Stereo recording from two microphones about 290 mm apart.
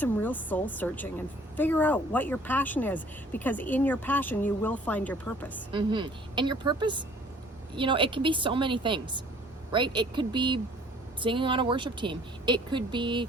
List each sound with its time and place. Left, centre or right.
0.0 s speech: centre
5.7 s a woman's voice: centre